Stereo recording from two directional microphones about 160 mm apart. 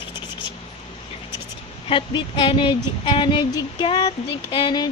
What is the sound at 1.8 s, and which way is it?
Speech, 30° left (ahead or behind).